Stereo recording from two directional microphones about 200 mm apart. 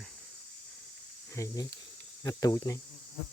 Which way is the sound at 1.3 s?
15° left (ahead or behind).